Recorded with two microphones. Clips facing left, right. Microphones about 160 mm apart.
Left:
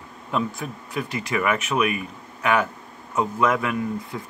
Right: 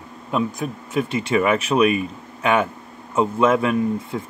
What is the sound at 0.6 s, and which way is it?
Speech, 25° right (ahead or behind).